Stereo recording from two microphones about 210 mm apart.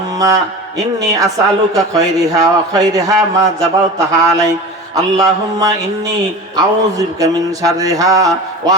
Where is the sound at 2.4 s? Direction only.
15° right (ahead or behind).